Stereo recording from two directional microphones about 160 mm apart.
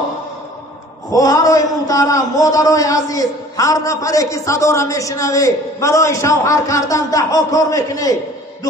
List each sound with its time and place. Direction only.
1.1 s a man's voice: 20° left (ahead or behind)